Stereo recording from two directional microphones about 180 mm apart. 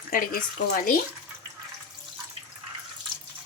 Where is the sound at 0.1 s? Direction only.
50° left (ahead or behind).